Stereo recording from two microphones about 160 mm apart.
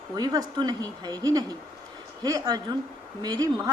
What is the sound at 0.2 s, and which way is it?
Speech, 25° right (ahead or behind).